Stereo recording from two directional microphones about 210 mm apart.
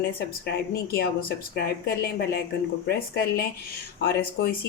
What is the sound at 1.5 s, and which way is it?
Speech, 50° left (ahead or behind).